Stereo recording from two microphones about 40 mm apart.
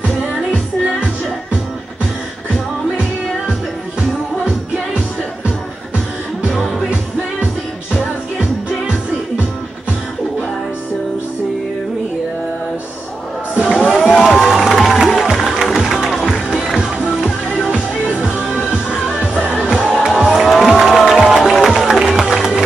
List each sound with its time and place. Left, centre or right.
13.6 s a sound: right
14.2 s music: centre
17.6 s music: centre
19.7 s music: right
20.2 s music: centre
22.2 s music: centre